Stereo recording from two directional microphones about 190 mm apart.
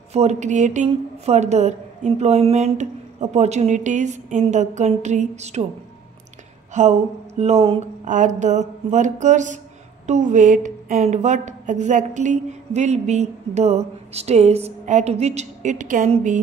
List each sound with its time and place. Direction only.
0.1 s a woman's voice: 35° right (ahead or behind)
6.7 s a woman's voice: 35° right (ahead or behind)